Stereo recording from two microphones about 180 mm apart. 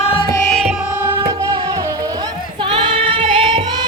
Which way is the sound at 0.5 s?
5° right (ahead or behind).